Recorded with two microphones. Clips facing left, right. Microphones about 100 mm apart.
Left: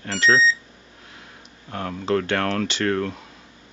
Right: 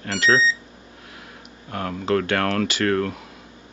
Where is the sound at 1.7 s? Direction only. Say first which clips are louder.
Right 1 dB; 45° right (ahead or behind).